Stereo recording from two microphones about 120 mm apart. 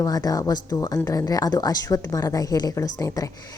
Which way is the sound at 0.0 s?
30° left (ahead or behind).